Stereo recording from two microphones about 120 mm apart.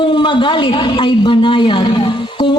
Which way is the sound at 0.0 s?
45° left (ahead or behind).